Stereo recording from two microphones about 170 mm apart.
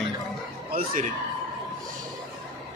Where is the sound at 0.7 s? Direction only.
55° right (ahead or behind).